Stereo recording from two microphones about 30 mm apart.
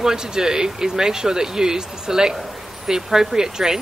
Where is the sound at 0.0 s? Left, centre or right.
Right.